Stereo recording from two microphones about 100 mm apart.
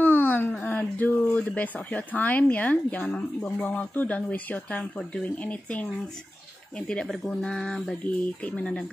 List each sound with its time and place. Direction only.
0.0 s speech: 15° left (ahead or behind)
6.9 s speech: 10° left (ahead or behind)